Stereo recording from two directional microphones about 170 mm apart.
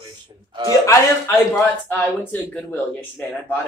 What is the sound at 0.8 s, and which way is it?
Speech, 15° left (ahead or behind).